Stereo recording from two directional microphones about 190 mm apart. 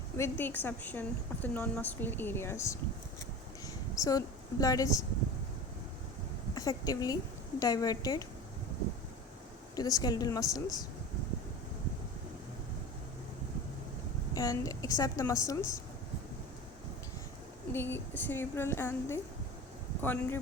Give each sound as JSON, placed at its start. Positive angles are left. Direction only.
{"t": 0.2, "sound": "a woman's voice", "side_deg": 10}
{"t": 3.9, "sound": "a woman's voice", "side_deg": 20}
{"t": 6.5, "sound": "a woman's voice", "side_deg": 20}
{"t": 9.7, "sound": "speech", "side_deg": 20}
{"t": 14.3, "sound": "a woman's voice", "side_deg": 20}
{"t": 17.7, "sound": "a woman's voice", "side_deg": 10}